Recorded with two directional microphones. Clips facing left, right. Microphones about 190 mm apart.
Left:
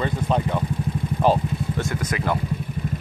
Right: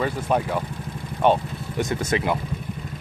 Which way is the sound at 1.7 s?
15° right (ahead or behind).